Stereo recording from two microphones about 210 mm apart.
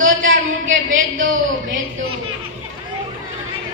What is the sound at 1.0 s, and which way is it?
Speech, 40° right (ahead or behind).